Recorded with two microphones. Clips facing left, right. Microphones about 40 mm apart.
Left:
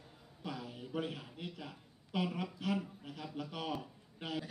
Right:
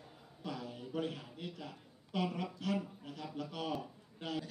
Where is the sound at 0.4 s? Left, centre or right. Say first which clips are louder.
Right 1 dB; centre.